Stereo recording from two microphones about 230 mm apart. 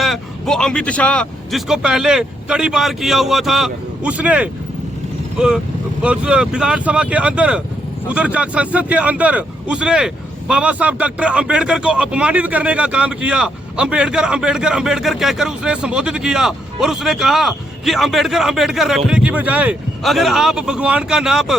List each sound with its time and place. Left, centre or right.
0.0 s speech: centre
6.0 s speech: centre